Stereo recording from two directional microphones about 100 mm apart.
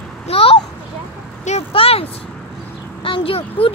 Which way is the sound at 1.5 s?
75° left (ahead or behind).